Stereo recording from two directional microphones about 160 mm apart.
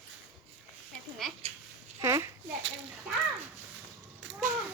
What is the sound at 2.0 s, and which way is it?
Speech, 20° right (ahead or behind).